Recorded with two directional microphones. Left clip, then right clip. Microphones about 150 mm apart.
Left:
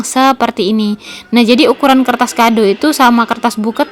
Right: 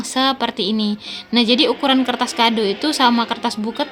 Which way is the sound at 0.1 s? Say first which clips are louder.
Left 8 dB; 55° left (ahead or behind).